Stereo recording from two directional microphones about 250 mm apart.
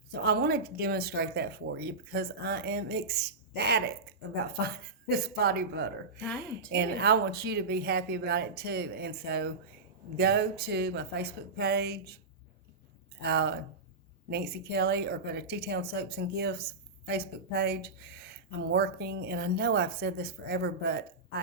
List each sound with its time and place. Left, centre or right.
0.1 s speech: right
6.1 s speech: centre
6.7 s speech: right
13.2 s speech: right